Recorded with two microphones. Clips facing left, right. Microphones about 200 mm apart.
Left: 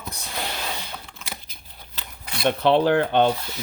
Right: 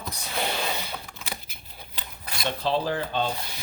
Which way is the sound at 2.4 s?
65° left (ahead or behind).